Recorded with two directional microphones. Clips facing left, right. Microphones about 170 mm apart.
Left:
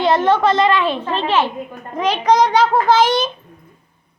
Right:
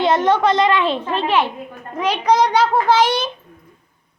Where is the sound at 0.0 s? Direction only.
20° right (ahead or behind).